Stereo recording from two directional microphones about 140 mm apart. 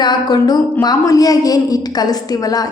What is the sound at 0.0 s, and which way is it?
Speech, 30° left (ahead or behind).